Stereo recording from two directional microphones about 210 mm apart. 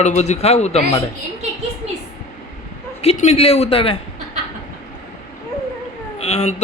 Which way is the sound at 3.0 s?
30° left (ahead or behind).